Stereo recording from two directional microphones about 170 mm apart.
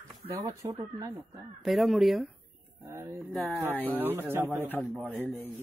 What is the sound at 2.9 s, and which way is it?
Speech, 15° right (ahead or behind).